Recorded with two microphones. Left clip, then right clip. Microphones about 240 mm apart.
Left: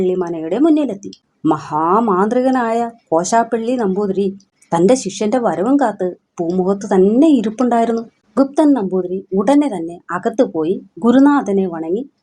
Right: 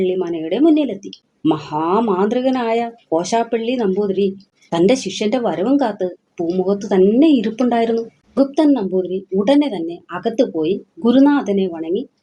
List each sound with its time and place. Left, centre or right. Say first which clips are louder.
0.0 s a woman's voice: left 1 dB; left